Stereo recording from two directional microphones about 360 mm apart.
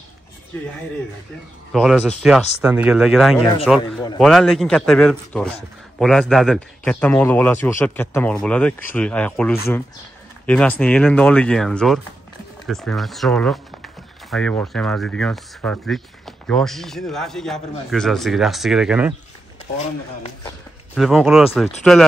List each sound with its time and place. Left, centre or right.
1.7 s speech: centre
19.8 s speech: centre
20.9 s speech: centre